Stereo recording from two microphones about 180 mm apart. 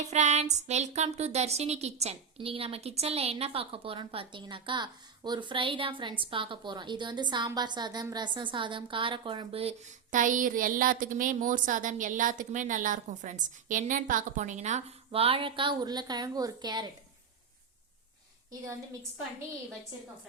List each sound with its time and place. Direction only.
0.1 s speech: 40° right (ahead or behind); by 16.9 s 25° right (ahead or behind)